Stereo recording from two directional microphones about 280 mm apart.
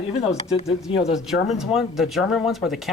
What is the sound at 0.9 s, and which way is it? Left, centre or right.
Speech, left.